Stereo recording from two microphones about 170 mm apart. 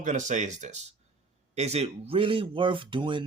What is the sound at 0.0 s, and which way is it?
Speech, 45° right (ahead or behind).